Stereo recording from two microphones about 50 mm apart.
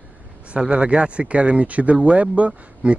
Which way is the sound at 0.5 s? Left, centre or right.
Centre.